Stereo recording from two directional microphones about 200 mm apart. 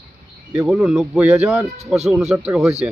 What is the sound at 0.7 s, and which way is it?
Speech, centre (ahead or behind).